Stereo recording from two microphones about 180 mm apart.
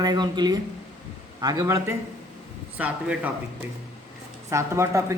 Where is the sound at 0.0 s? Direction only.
25° right (ahead or behind).